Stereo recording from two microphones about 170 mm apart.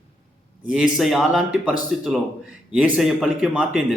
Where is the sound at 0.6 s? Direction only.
5° right (ahead or behind).